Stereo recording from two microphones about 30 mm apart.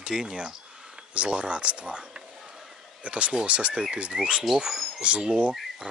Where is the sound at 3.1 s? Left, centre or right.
Right.